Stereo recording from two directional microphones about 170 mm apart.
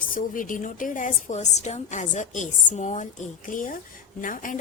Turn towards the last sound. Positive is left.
turn(degrees=50)  # may be behind; listen again after turning